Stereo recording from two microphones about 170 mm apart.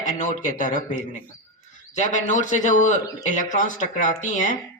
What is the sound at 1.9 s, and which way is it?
A man's voice, 45° left (ahead or behind).